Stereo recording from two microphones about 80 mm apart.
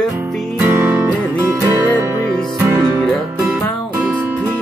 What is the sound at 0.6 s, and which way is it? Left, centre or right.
Music, right.